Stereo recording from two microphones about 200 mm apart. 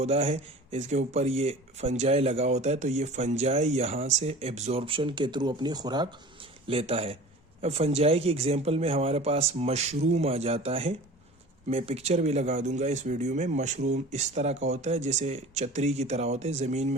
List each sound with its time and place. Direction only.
0.0 s speech: 30° right (ahead or behind)